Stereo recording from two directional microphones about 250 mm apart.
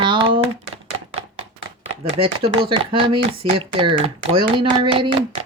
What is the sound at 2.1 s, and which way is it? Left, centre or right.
Speech, right.